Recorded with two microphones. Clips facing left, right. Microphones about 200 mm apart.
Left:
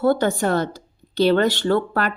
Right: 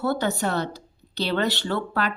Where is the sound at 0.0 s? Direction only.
50° left (ahead or behind).